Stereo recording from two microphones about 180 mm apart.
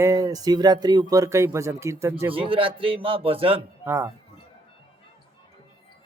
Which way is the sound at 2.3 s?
30° right (ahead or behind).